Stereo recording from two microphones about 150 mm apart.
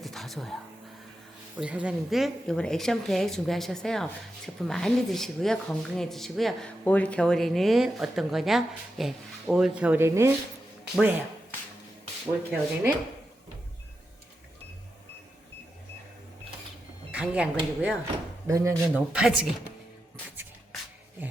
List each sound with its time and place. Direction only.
0.0 s a sound: centre (ahead or behind)
1.5 s a woman's voice: 10° right (ahead or behind)
12.2 s speech: 10° right (ahead or behind)
17.1 s speech: 10° right (ahead or behind)
18.4 s speech: 20° right (ahead or behind)
19.1 s speech: 5° right (ahead or behind)